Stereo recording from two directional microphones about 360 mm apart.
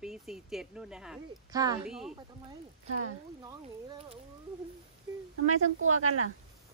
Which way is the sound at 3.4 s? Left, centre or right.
Centre.